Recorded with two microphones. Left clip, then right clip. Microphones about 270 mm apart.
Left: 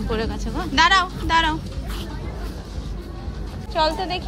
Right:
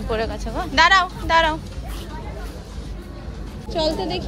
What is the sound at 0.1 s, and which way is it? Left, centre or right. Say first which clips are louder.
A woman's voice: right 3 dB; centre.